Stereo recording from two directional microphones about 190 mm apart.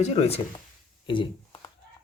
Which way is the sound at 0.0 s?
35° left (ahead or behind).